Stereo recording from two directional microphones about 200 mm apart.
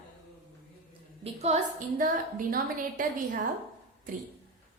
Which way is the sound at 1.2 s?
30° right (ahead or behind).